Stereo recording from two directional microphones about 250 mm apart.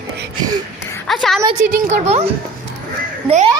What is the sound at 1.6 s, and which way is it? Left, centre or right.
Speech, right.